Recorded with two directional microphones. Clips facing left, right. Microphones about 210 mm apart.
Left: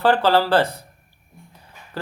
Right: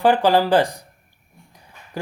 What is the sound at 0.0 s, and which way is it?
Speech, 15° right (ahead or behind).